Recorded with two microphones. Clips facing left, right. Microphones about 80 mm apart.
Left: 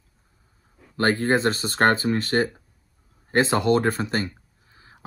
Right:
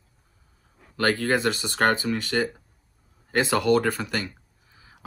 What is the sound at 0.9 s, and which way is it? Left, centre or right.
Speech, left.